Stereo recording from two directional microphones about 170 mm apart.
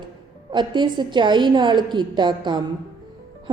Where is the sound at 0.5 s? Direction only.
25° right (ahead or behind).